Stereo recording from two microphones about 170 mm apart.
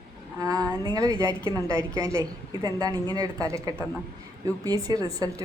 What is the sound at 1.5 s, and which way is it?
A woman's voice, 20° right (ahead or behind).